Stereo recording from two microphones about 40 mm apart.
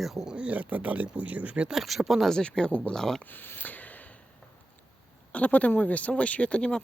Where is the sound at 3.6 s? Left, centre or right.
Left.